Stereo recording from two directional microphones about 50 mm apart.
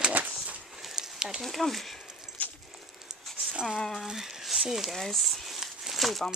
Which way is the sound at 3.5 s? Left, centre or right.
Centre.